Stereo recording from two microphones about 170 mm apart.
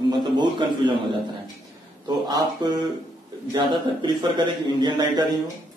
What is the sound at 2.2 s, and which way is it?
A man's voice, 25° right (ahead or behind).